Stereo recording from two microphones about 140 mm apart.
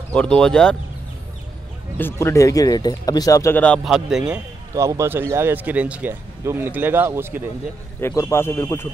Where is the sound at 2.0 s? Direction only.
15° left (ahead or behind).